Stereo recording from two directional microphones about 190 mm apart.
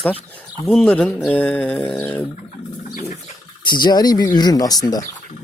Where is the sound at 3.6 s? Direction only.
25° left (ahead or behind).